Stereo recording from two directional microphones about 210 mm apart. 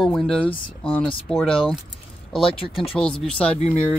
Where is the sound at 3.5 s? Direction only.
35° left (ahead or behind).